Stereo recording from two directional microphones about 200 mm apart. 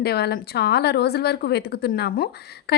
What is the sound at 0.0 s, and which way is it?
A woman's voice, 50° left (ahead or behind).